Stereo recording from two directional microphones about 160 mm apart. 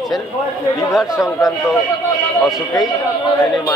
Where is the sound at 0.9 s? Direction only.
5° right (ahead or behind).